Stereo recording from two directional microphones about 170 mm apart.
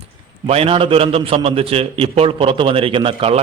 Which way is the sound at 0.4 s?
35° right (ahead or behind).